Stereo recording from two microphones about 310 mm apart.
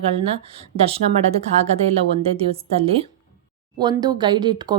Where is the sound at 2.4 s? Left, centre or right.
Centre.